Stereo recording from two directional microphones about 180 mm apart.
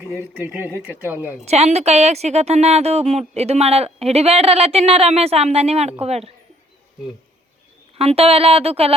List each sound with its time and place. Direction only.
0.1 s speech: 10° right (ahead or behind)
1.5 s a woman's voice: 35° right (ahead or behind)
7.9 s a woman's voice: 35° right (ahead or behind)